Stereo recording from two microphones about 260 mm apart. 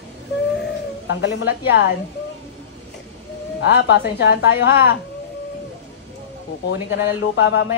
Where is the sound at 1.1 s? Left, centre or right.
Left.